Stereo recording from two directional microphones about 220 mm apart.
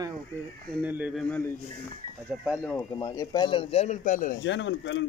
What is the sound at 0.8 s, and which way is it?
Speech, 5° right (ahead or behind).